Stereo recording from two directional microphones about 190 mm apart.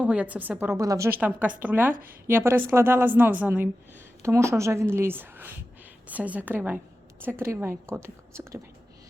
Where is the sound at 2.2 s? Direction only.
15° right (ahead or behind).